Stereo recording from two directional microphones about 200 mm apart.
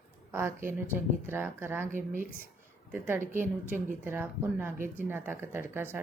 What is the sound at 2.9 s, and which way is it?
A woman's voice, 10° right (ahead or behind).